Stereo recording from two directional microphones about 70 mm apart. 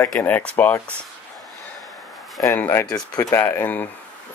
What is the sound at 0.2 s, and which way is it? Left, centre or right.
Speech, left.